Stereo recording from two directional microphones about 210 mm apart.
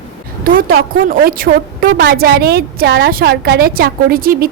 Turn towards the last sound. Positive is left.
turn(degrees=-45)  # may be behind; listen again after turning